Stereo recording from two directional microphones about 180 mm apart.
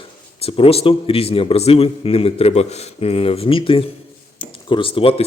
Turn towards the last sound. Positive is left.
turn(degrees=30)  # may be behind; listen again after turning